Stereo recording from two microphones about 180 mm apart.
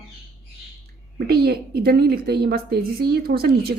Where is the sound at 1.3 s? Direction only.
60° right (ahead or behind).